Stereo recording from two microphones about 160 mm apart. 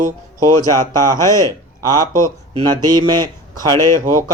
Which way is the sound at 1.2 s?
20° left (ahead or behind).